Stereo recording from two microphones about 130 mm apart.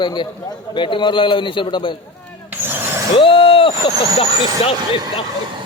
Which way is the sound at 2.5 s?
15° right (ahead or behind).